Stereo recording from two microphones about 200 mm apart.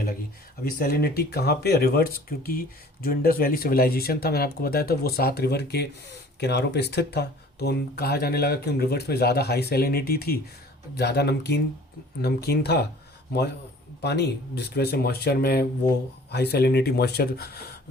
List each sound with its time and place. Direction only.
0.6 s speech: 50° left (ahead or behind)
14.0 s speech: 55° left (ahead or behind)